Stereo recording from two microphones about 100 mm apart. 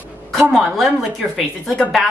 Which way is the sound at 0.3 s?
5° left (ahead or behind).